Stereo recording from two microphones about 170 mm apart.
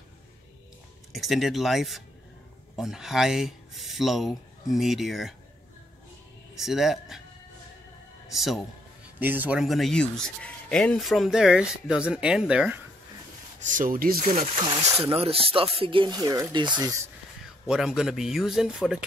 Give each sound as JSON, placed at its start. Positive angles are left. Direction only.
{"t": 1.1, "sound": "speech", "side_deg": 0}
{"t": 6.5, "sound": "speech", "side_deg": 0}
{"t": 8.3, "sound": "speech", "side_deg": 0}
{"t": 13.6, "sound": "speech", "side_deg": -50}
{"t": 14.4, "sound": "speech", "side_deg": -30}
{"t": 17.6, "sound": "speech", "side_deg": -5}